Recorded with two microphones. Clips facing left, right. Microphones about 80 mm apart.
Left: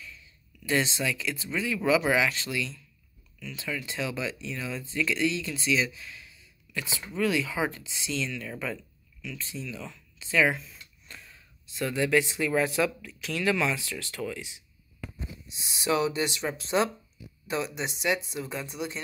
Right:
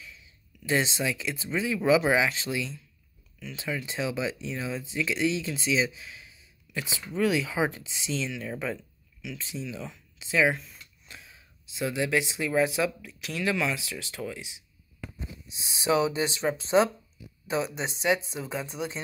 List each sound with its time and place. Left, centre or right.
0.0 s speech: centre
10.4 s speech: centre